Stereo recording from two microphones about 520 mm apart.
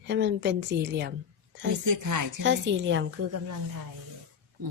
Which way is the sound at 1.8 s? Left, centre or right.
Right.